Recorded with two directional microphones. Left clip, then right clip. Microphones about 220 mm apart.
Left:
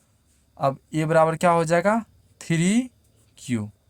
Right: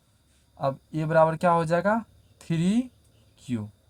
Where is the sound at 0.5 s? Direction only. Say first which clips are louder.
Left 5 dB; 45° left (ahead or behind).